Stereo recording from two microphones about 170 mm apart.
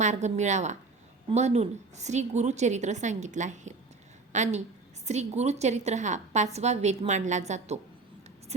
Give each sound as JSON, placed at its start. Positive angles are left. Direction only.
{"t": 0.0, "sound": "a woman's voice", "side_deg": -45}